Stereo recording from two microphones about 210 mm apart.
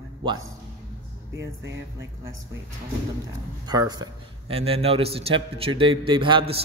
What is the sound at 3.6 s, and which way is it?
A man's voice, 20° right (ahead or behind).